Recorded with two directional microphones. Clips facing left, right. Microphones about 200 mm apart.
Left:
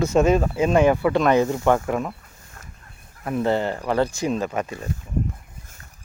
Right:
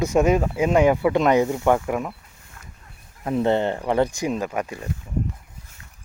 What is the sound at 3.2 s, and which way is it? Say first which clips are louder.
Speech: right 2 dB; 20° right (ahead or behind).